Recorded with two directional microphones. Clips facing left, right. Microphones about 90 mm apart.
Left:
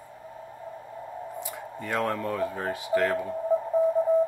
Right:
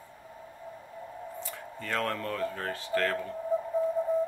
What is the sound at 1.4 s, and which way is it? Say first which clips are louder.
Speech: left 4 dB; 15° left (ahead or behind).